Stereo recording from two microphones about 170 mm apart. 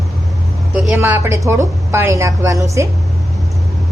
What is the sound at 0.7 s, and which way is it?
Speech, 5° right (ahead or behind).